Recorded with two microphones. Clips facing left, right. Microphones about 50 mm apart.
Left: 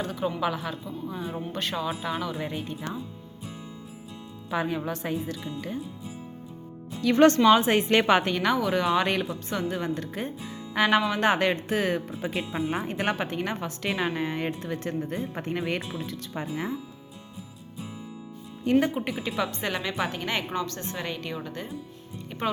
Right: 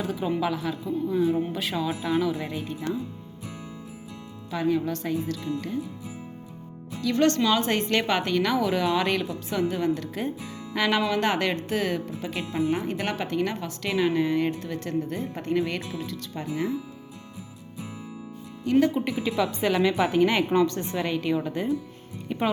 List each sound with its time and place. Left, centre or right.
0.0 s speech: centre
4.5 s a woman's voice: left
7.0 s speech: left; by 16.6 s centre
18.8 s speech: centre
19.6 s a woman's voice: centre
21.0 s a woman's voice: centre